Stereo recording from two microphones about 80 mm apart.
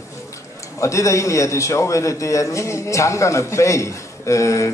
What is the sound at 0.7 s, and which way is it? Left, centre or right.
A man's voice, left.